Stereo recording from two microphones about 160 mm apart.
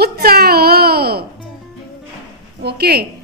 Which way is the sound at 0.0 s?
75° right (ahead or behind).